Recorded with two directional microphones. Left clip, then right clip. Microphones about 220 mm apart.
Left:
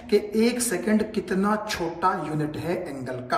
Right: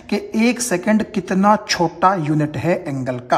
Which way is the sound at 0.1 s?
25° right (ahead or behind).